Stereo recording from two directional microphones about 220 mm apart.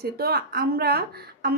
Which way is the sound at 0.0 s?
45° right (ahead or behind).